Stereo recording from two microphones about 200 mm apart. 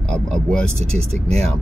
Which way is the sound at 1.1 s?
30° right (ahead or behind).